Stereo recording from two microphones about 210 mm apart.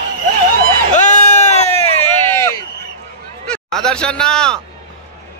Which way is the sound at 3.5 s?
Centre (ahead or behind).